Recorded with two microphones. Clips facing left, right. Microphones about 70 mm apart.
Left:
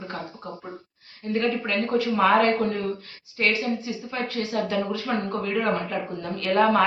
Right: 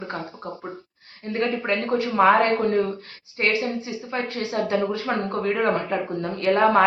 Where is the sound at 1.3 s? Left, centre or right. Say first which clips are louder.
Right 1 dB; right.